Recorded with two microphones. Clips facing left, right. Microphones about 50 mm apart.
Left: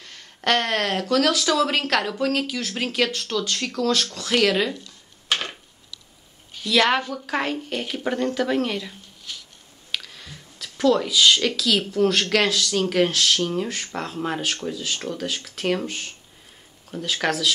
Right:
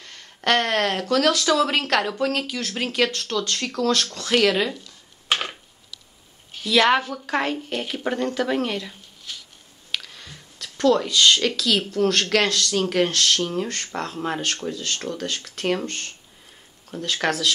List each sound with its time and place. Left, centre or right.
0.0 s speech: centre
4.8 s a sound: centre
6.6 s speech: centre